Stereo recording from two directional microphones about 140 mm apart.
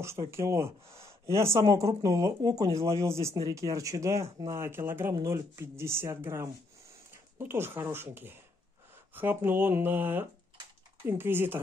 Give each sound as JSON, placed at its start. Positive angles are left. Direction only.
{"t": 0.3, "sound": "speech", "side_deg": -20}